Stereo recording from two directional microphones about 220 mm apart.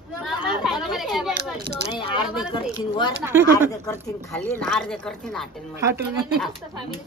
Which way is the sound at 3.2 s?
10° right (ahead or behind).